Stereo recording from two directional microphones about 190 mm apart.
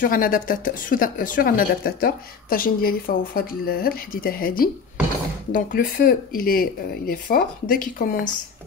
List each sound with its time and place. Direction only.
0.0 s speech: 45° left (ahead or behind)